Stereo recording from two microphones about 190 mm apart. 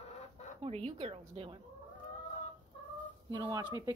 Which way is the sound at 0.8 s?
30° right (ahead or behind).